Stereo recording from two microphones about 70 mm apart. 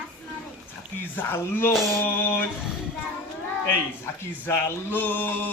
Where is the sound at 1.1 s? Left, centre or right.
Left.